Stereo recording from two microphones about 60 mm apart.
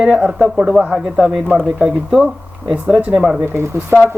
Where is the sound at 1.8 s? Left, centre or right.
Centre.